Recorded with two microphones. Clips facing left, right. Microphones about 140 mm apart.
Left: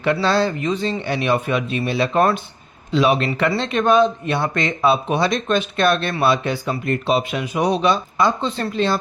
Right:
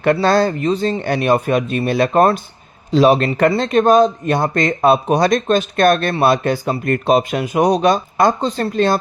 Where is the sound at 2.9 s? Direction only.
35° right (ahead or behind).